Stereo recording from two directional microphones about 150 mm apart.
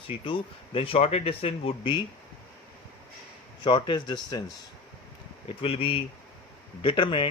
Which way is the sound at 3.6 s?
30° left (ahead or behind).